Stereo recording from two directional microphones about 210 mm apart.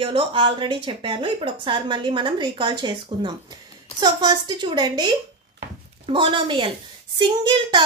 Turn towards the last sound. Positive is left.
turn(degrees=-20)  # may be behind; listen again after turning